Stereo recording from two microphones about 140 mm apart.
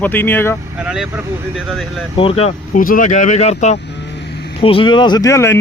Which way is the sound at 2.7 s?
75° left (ahead or behind).